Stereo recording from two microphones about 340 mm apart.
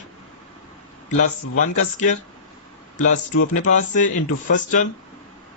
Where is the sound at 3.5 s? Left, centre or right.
Left.